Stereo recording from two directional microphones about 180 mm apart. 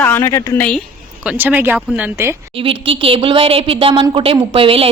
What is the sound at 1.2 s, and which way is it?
Speech, 10° right (ahead or behind).